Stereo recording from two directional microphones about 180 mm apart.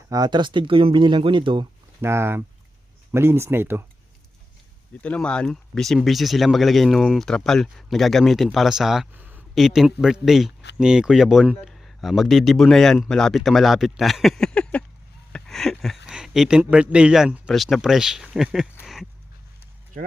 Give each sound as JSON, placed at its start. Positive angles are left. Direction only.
{"t": 0.1, "sound": "speech", "side_deg": -25}
{"t": 2.0, "sound": "speech", "side_deg": -15}
{"t": 4.9, "sound": "speech", "side_deg": 5}
{"t": 15.3, "sound": "a sound", "side_deg": 0}
{"t": 16.0, "sound": "speech", "side_deg": -5}